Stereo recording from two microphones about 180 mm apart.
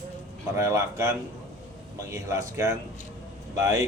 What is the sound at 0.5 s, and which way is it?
A man's voice, 15° right (ahead or behind).